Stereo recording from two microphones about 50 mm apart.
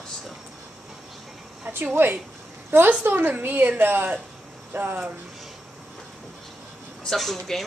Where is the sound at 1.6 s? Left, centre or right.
Right.